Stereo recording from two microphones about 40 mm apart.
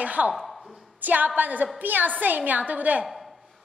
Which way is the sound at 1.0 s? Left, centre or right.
Right.